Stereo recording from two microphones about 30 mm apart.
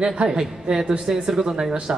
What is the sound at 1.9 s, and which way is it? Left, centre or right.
Speech, right.